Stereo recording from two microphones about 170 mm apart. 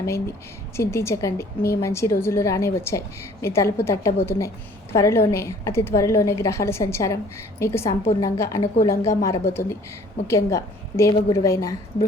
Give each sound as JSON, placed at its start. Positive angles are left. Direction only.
{"t": 0.8, "sound": "a woman's voice", "side_deg": 15}